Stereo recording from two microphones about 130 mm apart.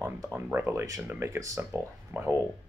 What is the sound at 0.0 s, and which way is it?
Speech, 15° right (ahead or behind).